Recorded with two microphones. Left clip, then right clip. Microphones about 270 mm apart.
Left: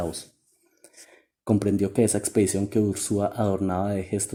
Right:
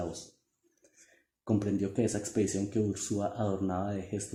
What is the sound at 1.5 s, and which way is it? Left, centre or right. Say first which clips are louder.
Speech: left 8 dB; left.